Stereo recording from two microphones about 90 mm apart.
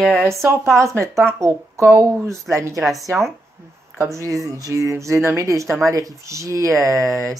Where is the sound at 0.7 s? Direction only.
35° right (ahead or behind).